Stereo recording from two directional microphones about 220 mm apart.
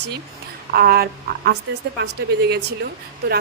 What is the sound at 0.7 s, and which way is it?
Speech, 45° right (ahead or behind).